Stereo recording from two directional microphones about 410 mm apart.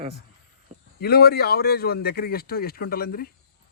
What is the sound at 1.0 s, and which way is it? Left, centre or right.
Speech, left.